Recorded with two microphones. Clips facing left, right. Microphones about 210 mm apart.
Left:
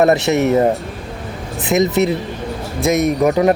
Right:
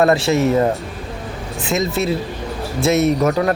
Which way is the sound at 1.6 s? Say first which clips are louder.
Left 5 dB; 20° left (ahead or behind).